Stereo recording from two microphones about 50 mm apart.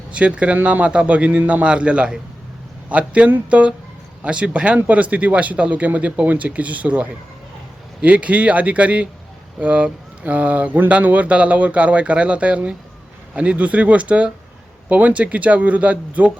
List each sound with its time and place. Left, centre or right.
0.1 s speech: right